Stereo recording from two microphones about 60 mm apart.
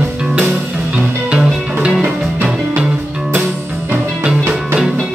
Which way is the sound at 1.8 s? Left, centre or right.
Centre.